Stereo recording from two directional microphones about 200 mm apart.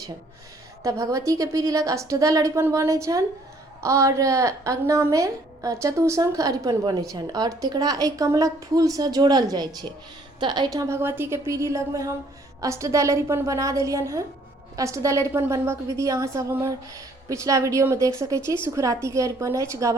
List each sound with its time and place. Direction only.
0.8 s a woman's voice: 15° right (ahead or behind)